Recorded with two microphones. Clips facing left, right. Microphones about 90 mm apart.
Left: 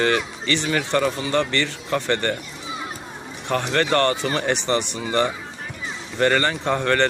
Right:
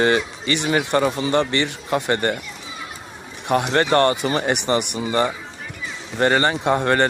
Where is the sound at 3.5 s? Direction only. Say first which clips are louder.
Right 3 dB; 15° right (ahead or behind).